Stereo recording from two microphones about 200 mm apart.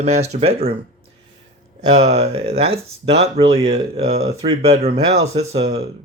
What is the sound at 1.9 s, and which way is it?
A man's voice, 35° right (ahead or behind).